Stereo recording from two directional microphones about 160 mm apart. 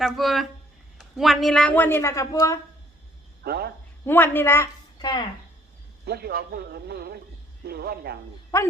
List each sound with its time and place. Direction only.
0.0 s a woman's voice: centre (ahead or behind); by 2.6 s 20° left (ahead or behind)
3.4 s speech: 80° right
4.0 s a woman's voice: 15° left (ahead or behind)
6.1 s speech: 75° right (ahead or behind)
8.5 s speech: 20° left (ahead or behind)